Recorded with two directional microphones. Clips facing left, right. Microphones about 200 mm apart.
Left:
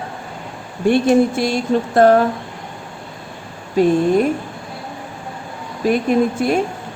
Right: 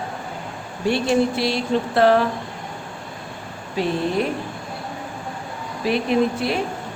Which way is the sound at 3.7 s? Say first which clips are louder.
Left 8 dB; 45° left (ahead or behind).